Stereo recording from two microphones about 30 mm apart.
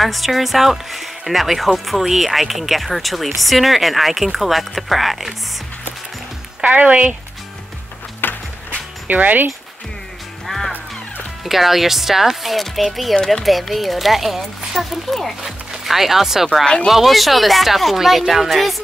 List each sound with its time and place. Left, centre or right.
0.0 s speech: centre
6.7 s speech: right
9.0 s speech: right
10.4 s music: centre
11.4 s speech: centre
12.5 s speech: centre
13.2 s speech: centre
13.5 s speech: centre
15.8 s speech: centre